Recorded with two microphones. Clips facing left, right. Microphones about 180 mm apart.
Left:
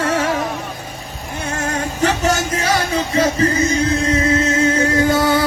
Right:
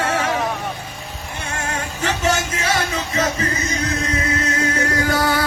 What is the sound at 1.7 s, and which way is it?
Music, 40° left (ahead or behind).